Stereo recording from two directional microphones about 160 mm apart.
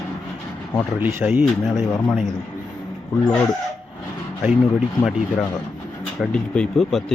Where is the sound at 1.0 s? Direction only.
15° right (ahead or behind).